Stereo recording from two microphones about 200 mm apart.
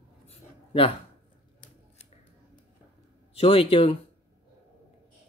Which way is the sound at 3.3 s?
30° left (ahead or behind).